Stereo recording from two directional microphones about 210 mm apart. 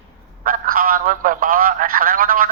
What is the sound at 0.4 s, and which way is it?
A man's voice, 40° right (ahead or behind).